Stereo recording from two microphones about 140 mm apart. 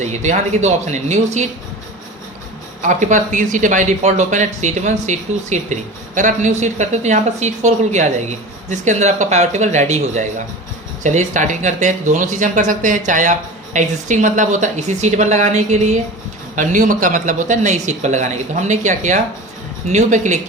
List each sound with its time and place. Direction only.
0.0 s a woman's voice: 55° right (ahead or behind)
2.8 s a woman's voice: 65° right (ahead or behind)